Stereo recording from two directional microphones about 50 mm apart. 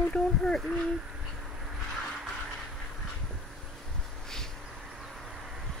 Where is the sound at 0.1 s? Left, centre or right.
Centre.